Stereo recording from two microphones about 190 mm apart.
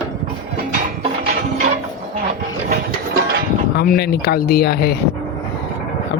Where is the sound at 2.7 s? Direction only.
50° right (ahead or behind).